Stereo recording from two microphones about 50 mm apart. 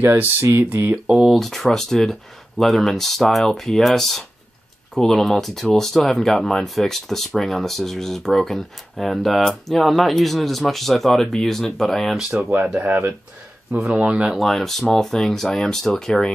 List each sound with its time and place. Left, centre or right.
0.0 s speech: right
1.0 s speech: centre
1.4 s speech: centre
12.8 s speech: right
13.9 s speech: right
14.4 s speech: centre